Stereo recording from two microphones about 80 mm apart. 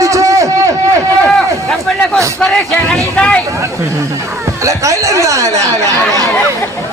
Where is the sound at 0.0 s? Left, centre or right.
Right.